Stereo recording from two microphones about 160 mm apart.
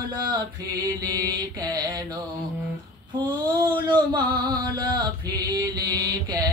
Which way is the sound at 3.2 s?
30° right (ahead or behind).